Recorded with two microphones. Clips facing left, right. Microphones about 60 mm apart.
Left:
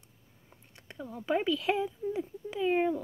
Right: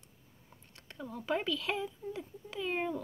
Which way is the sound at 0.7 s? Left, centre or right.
Centre.